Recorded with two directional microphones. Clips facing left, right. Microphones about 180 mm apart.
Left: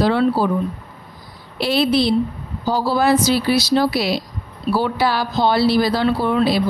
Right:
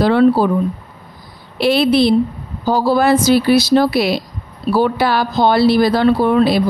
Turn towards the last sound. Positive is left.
turn(degrees=-55)  # may be behind; listen again after turning